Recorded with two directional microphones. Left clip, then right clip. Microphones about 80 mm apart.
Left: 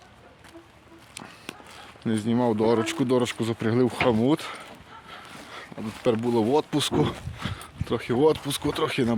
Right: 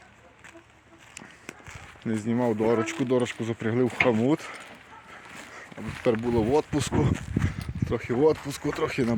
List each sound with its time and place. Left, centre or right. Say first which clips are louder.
2.0 s speech: left 3 dB; centre
2.5 s speech: left 1 dB; left
3.5 s speech: left 3 dB; left
3.8 s speech: right 2 dB; left
4.3 s speech: left 2 dB; centre
5.1 s a sound: left 2 dB; centre
6.4 s speech: left 1 dB; centre